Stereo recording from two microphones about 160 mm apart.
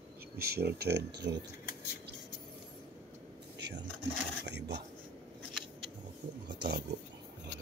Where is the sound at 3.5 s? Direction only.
90° right.